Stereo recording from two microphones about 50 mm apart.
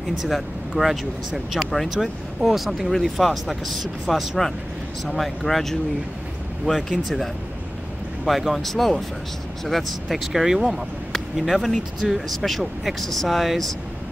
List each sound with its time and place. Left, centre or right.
0.2 s speech: centre
8.3 s speech: centre
12.4 s speech: centre